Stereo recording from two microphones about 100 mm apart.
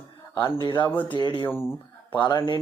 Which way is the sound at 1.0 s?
55° left (ahead or behind).